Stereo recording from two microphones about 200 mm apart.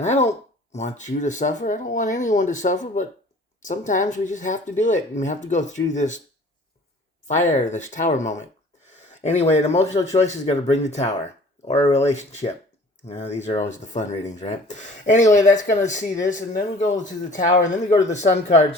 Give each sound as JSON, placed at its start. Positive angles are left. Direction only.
{"t": 0.0, "sound": "speech", "side_deg": 35}
{"t": 7.3, "sound": "speech", "side_deg": 35}